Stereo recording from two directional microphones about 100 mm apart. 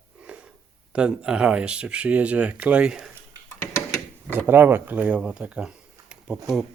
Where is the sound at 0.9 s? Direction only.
10° right (ahead or behind).